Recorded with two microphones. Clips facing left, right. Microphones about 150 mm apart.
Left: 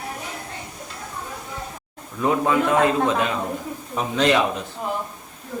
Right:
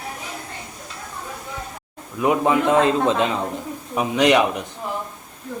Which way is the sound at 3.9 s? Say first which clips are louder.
Right 3 dB; 15° right (ahead or behind).